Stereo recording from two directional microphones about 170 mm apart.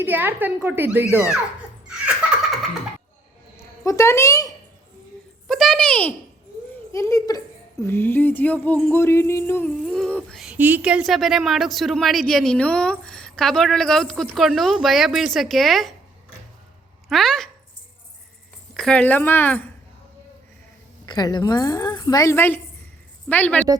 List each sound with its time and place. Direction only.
0.0 s a child's voice: 10° right (ahead or behind)
3.6 s a woman's voice: 15° left (ahead or behind)
5.5 s a sound: centre (ahead or behind)
6.9 s a woman's voice: 15° left (ahead or behind); by 16.0 s centre (ahead or behind)
17.1 s a woman's voice: centre (ahead or behind)
18.7 s speech: 5° left (ahead or behind)
21.1 s a woman's voice: 25° left (ahead or behind); by 23.6 s 10° left (ahead or behind)